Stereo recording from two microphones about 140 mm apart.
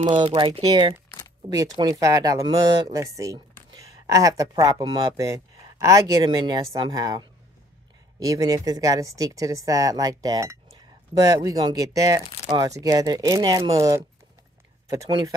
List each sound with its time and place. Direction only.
0.2 s speech: 30° right (ahead or behind)